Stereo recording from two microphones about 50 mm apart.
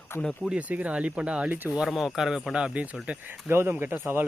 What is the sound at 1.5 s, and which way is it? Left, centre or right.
Speech, right.